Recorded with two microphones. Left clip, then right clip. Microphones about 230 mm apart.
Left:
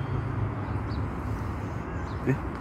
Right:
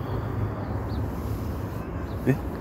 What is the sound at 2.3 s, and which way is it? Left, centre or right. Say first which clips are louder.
Speech: right 4 dB; centre.